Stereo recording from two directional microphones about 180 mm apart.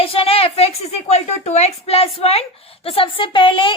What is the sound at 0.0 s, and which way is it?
A woman's voice, 30° left (ahead or behind).